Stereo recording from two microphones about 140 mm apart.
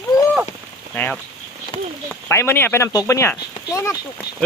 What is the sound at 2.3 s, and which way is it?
Speech, 15° left (ahead or behind).